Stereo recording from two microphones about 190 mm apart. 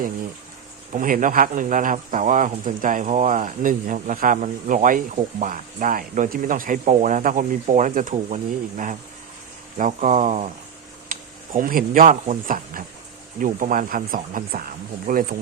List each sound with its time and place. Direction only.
0.9 s speech: 45° right (ahead or behind)
11.1 s a sound: 45° right (ahead or behind)
12.3 s speech: 45° right (ahead or behind)